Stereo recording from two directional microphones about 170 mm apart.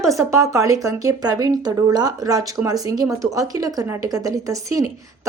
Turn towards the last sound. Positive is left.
turn(degrees=-20)  # may be behind; listen again after turning